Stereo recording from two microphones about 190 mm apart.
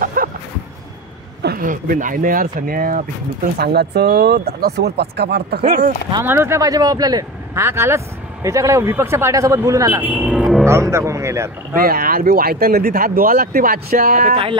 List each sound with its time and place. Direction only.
0.0 s a sound: 45° right (ahead or behind)
1.4 s speech: 50° right (ahead or behind)
3.5 s speech: 55° right (ahead or behind)
6.2 s speech: 10° right (ahead or behind)
11.7 s speech: 50° right (ahead or behind)